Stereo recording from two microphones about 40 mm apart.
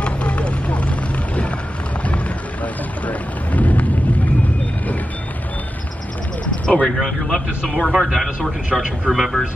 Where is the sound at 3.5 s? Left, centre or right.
Left.